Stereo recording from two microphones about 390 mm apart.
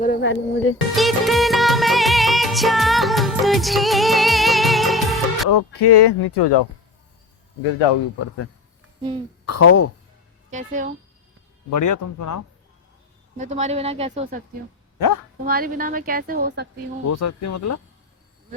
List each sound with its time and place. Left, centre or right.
0.0 s music: left
0.9 s music: centre
5.5 s speech: left
9.0 s a child's voice: centre
9.5 s speech: left
10.5 s a woman's voice: centre
11.7 s speech: left
13.3 s a woman's voice: centre
14.9 s speech: left
15.4 s a woman's voice: right
17.1 s speech: left